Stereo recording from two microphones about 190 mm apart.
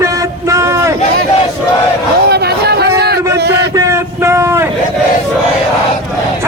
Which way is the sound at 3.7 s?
15° right (ahead or behind).